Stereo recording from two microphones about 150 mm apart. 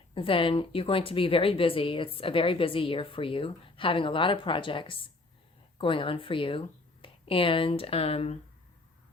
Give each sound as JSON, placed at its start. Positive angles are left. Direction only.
{"t": 0.1, "sound": "speech", "side_deg": 35}